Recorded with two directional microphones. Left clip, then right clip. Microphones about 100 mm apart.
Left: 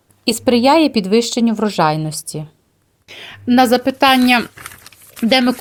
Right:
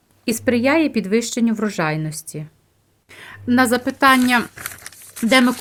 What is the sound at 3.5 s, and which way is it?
Speech, 35° left (ahead or behind).